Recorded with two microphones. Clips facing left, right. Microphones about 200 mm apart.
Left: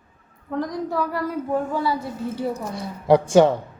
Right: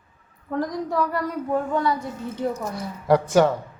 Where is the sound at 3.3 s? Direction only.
25° left (ahead or behind).